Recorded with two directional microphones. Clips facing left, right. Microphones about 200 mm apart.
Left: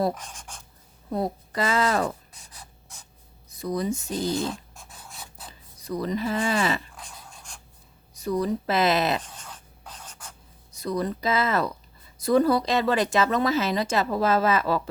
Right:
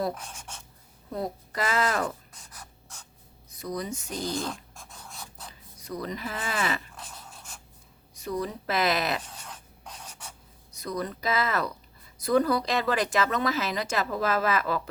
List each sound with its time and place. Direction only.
0.2 s speech: 5° right (ahead or behind)
1.1 s speech: 30° left (ahead or behind)
3.6 s speech: 30° left (ahead or behind)
4.1 s dog: centre (ahead or behind)
5.5 s speech: 30° left (ahead or behind)
7.3 s filing: 5° right (ahead or behind)
8.2 s speech: 30° left (ahead or behind)
9.2 s a sound: 10° right (ahead or behind)
9.9 s writing: 10° right (ahead or behind)
10.7 s speech: 30° left (ahead or behind)